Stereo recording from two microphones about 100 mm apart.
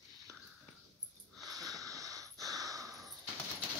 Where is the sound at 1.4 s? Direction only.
35° right (ahead or behind).